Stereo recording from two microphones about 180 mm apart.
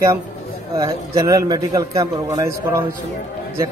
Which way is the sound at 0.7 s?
15° right (ahead or behind).